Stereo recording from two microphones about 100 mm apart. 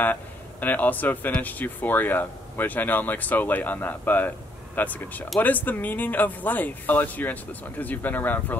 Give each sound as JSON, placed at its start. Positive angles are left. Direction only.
{"t": 0.0, "sound": "speech", "side_deg": 15}